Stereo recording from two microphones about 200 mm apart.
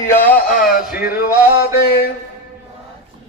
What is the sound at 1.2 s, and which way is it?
Music, 50° left (ahead or behind).